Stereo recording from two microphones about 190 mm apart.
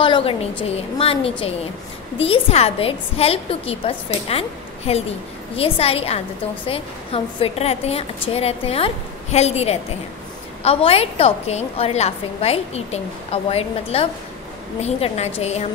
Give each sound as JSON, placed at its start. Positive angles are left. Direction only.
{"t": 0.0, "sound": "a woman's voice", "side_deg": 25}